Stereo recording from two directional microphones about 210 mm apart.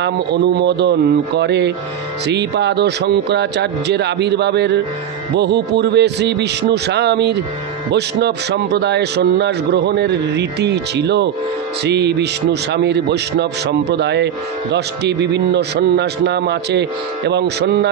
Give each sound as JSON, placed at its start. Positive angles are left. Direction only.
{"t": 0.0, "sound": "a man's voice", "side_deg": -55}